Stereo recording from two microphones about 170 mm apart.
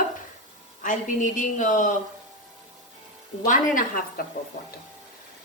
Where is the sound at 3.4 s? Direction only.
50° left (ahead or behind).